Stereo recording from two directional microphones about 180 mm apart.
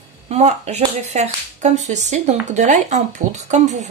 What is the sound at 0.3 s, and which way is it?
Speech, 40° right (ahead or behind).